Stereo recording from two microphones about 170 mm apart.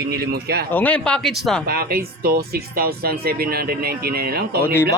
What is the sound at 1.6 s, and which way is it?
Speech, 60° right (ahead or behind).